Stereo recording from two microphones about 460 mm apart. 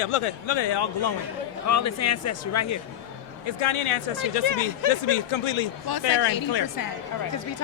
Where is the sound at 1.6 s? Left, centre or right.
Left.